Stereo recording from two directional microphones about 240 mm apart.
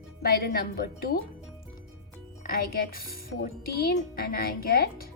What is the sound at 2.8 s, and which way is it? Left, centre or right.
A woman's voice, left.